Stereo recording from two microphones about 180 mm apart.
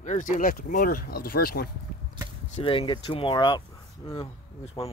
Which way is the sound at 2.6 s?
30° left (ahead or behind).